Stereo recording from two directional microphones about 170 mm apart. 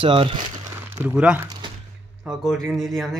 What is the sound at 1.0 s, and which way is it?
A man's voice, 5° right (ahead or behind).